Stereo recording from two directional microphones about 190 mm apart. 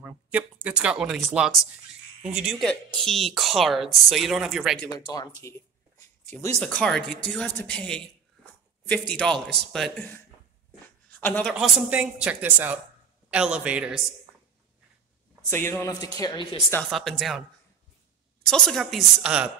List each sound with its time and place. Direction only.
0.0 s speech: 10° right (ahead or behind)
4.9 s speech: 20° left (ahead or behind)
6.6 s speech: 5° left (ahead or behind)
11.1 s a sound: 10° left (ahead or behind)
11.5 s speech: 5° right (ahead or behind)
15.5 s speech: 10° left (ahead or behind)
16.9 s speech: centre (ahead or behind)
18.4 s speech: centre (ahead or behind)